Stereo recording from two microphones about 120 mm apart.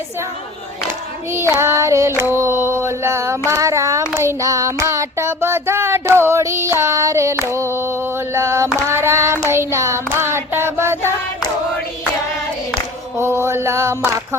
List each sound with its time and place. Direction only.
1.3 s child singing: 20° right (ahead or behind)
13.1 s mantra: 20° right (ahead or behind)